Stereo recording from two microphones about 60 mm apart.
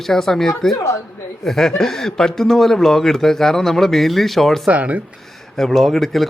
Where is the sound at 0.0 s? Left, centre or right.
Centre.